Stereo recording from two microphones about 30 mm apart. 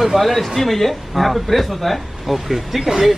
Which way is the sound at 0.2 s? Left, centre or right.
Centre.